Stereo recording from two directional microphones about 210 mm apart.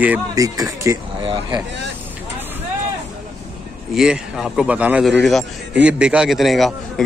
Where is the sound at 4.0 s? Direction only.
Centre (ahead or behind).